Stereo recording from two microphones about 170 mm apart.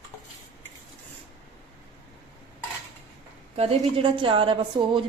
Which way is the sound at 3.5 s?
35° right (ahead or behind).